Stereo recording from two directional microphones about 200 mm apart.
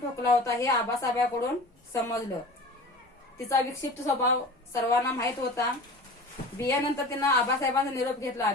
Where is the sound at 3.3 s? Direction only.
15° left (ahead or behind).